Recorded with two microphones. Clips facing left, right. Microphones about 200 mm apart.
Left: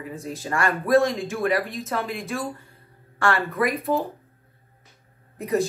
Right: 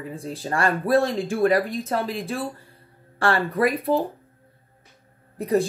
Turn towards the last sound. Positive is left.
turn(degrees=-35)  # may be behind; listen again after turning